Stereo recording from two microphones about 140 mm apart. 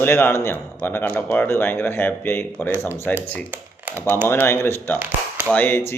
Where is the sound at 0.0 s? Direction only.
15° left (ahead or behind).